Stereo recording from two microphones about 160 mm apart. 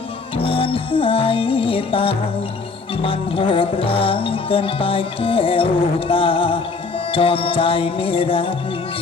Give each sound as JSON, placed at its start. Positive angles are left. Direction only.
{"t": 0.4, "sound": "music", "side_deg": 35}